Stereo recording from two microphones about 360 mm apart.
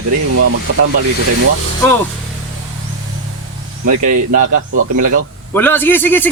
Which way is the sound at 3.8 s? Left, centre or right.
Right.